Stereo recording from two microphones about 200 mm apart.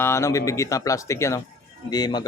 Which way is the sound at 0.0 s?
15° left (ahead or behind).